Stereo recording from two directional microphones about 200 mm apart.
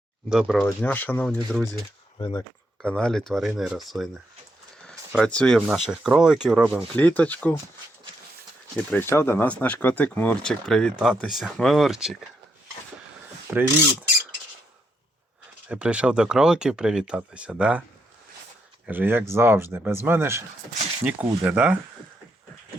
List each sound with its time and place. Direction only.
0.3 s speech: centre (ahead or behind)
2.1 s speech: 20° left (ahead or behind)
2.8 s speech: 5° left (ahead or behind)
6.9 s speech: 10° left (ahead or behind)
8.9 s speech: 10° left (ahead or behind)
13.5 s speech: 10° right (ahead or behind)
15.7 s speech: 5° right (ahead or behind)
18.9 s speech: 10° right (ahead or behind)